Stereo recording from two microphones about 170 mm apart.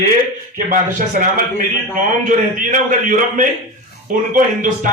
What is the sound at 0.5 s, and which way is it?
A man's voice, 55° right (ahead or behind).